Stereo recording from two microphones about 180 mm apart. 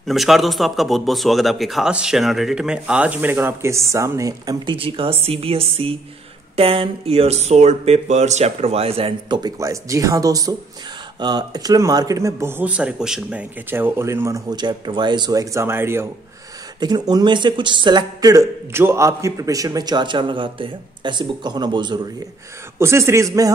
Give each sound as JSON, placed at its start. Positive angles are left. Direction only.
{"t": 0.0, "sound": "a man's voice", "side_deg": 0}